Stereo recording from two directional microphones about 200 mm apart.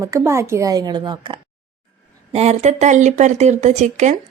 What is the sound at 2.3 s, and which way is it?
Speech, 35° right (ahead or behind).